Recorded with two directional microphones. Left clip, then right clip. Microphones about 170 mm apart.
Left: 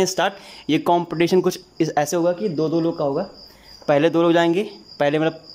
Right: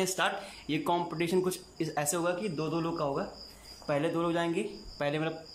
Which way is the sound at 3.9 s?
60° left (ahead or behind).